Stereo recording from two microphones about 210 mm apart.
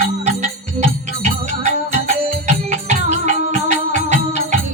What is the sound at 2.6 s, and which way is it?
Music, 35° right (ahead or behind).